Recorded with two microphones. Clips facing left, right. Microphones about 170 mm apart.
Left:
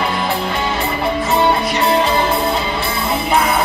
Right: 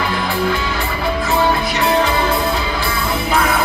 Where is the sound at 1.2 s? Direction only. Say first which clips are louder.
Left 1 dB; 25° left (ahead or behind).